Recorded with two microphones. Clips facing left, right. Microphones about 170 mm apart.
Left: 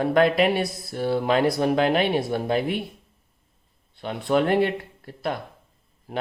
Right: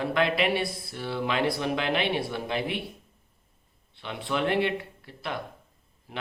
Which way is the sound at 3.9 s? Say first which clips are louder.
Left 8 dB; 45° left (ahead or behind).